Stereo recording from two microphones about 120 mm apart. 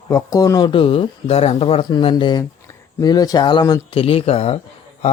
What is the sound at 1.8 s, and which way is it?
Speech, 40° left (ahead or behind).